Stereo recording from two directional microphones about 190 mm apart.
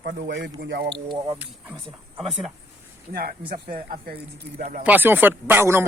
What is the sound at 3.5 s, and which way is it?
Speech, 50° right (ahead or behind).